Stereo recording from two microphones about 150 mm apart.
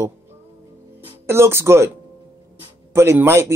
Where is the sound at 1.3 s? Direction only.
15° right (ahead or behind).